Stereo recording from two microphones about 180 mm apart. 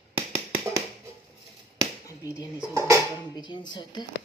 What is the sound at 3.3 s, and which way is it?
Speech, 25° left (ahead or behind).